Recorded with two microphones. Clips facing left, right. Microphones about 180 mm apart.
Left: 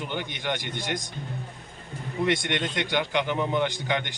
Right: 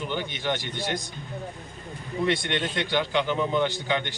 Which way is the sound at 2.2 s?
15° left (ahead or behind).